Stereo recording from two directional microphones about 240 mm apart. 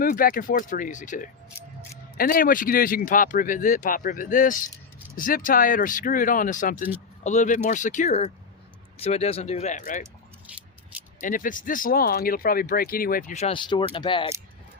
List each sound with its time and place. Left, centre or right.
0.0 s speech: left
10.0 s keys jangling: centre
11.2 s speech: left